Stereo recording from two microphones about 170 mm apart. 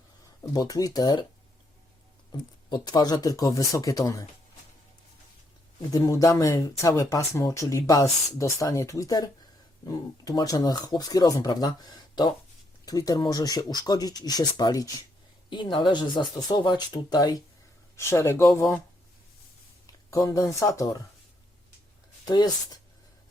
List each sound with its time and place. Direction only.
0.5 s speech: 20° left (ahead or behind)
2.6 s speech: 25° left (ahead or behind)
5.9 s speech: 20° left (ahead or behind)
19.9 s speech: 20° left (ahead or behind)
22.3 s speech: 25° left (ahead or behind)